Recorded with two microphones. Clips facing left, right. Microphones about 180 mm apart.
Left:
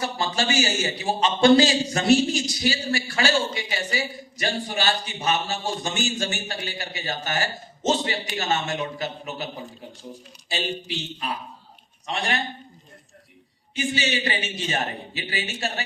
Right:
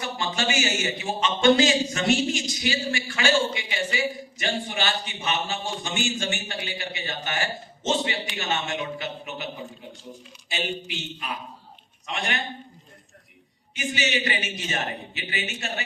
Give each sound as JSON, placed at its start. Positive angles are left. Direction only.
{"t": 0.0, "sound": "a man's voice", "side_deg": 35}
{"t": 13.7, "sound": "a man's voice", "side_deg": 30}